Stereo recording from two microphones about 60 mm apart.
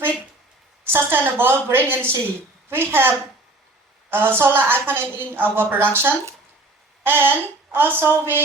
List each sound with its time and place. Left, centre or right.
0.9 s a woman's voice: right